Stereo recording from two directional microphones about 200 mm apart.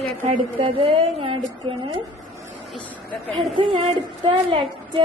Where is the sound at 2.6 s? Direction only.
5° left (ahead or behind).